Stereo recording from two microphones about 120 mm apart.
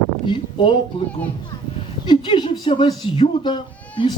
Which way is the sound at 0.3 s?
45° left (ahead or behind).